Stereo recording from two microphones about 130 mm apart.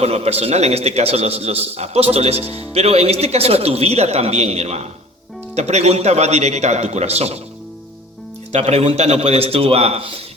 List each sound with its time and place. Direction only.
0.0 s a man's voice: 50° right (ahead or behind)
8.5 s a man's voice: 55° right (ahead or behind)